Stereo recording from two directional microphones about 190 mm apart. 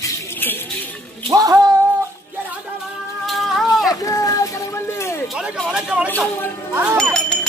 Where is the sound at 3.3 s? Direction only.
Centre (ahead or behind).